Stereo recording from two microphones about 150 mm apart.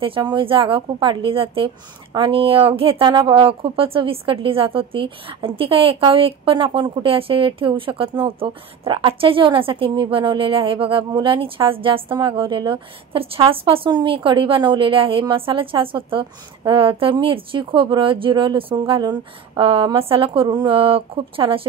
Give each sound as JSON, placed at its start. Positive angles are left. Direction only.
{"t": 0.0, "sound": "a woman's voice", "side_deg": -35}